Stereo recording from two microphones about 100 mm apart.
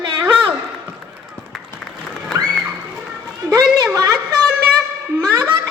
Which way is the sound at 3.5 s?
35° right (ahead or behind).